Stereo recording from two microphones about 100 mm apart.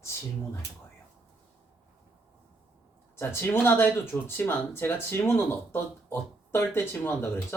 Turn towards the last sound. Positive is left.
turn(degrees=25)  # may be behind; listen again after turning